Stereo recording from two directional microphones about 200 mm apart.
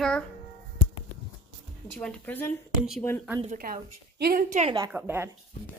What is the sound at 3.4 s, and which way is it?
A woman's voice, 40° right (ahead or behind).